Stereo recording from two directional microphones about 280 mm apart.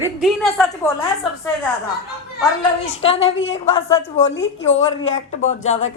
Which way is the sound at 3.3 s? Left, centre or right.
Left.